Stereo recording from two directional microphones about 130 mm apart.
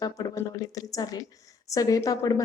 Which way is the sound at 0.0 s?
25° left (ahead or behind).